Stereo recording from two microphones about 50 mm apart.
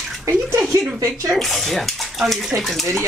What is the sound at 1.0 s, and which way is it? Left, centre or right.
Speech, right.